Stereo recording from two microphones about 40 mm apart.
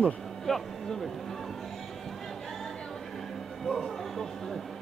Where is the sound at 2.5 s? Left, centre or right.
Centre.